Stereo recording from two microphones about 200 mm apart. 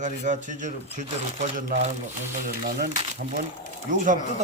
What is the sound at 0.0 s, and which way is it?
Speech, 40° right (ahead or behind).